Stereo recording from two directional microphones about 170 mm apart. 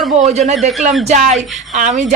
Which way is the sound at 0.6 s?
Centre (ahead or behind).